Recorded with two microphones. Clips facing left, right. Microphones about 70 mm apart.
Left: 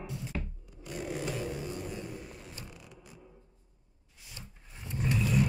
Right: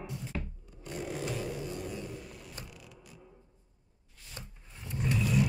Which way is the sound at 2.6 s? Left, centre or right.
Left.